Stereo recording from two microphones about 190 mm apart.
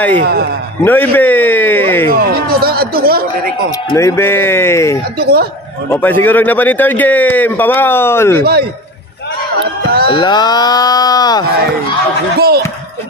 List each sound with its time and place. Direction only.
0.2 s speech: 55° right (ahead or behind)
0.8 s a man's voice: 10° left (ahead or behind)
2.1 s a sound: 55° right (ahead or behind)
3.9 s a man's voice: 15° left (ahead or behind)
5.2 s speech: 55° right (ahead or behind)
5.9 s a man's voice: 10° left (ahead or behind)
9.8 s speech: 55° right (ahead or behind)
10.1 s speech: 20° left (ahead or behind)
12.4 s speech: 55° right (ahead or behind)